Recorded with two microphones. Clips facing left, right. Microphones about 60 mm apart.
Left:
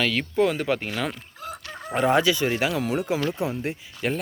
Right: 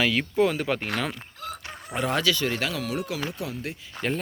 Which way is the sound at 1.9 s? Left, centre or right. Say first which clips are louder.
Left 5 dB; centre.